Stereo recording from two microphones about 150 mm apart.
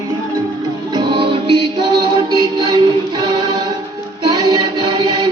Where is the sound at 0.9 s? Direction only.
35° right (ahead or behind).